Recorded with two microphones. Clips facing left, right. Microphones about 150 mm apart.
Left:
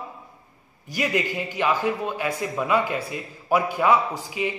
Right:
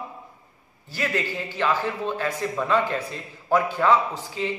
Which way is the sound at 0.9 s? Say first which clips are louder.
Left 2 dB; 15° left (ahead or behind).